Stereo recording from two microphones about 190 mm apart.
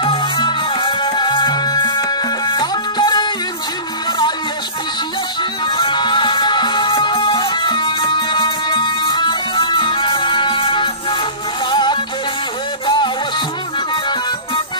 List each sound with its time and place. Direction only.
0.0 s music: 25° left (ahead or behind)
5.8 s music: 25° left (ahead or behind)